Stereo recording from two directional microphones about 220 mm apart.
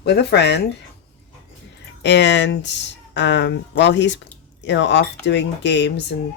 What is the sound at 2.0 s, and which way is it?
Speech, 50° left (ahead or behind).